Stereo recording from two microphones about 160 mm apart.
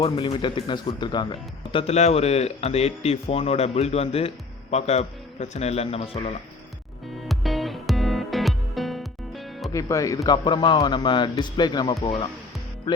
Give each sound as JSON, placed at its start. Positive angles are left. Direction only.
{"t": 0.3, "sound": "speech", "side_deg": 30}
{"t": 7.2, "sound": "music", "side_deg": 0}
{"t": 9.7, "sound": "speech", "side_deg": 20}